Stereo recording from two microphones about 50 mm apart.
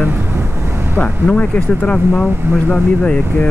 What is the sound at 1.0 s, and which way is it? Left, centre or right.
Speech, left.